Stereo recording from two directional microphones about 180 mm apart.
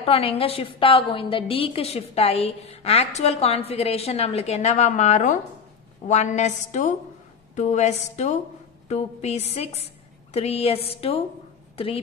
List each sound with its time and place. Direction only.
0.0 s a woman's voice: 30° left (ahead or behind)